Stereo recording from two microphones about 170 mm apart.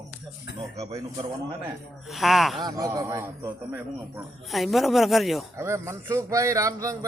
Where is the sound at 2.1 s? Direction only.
Centre (ahead or behind).